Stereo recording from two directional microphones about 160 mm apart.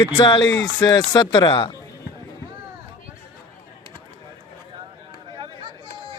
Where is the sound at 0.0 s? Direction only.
25° left (ahead or behind).